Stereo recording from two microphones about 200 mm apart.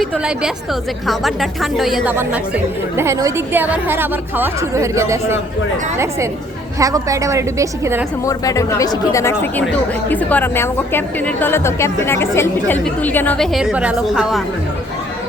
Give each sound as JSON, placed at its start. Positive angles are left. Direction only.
{"t": 0.0, "sound": "a woman's voice", "side_deg": -5}
{"t": 2.9, "sound": "a woman's voice", "side_deg": -15}
{"t": 6.7, "sound": "a woman's voice", "side_deg": -15}
{"t": 8.2, "sound": "speech", "side_deg": 15}